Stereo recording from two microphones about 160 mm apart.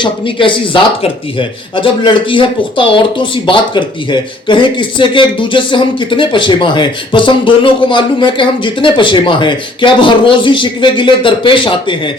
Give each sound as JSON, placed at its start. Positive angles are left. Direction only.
{"t": 0.0, "sound": "speech", "side_deg": 30}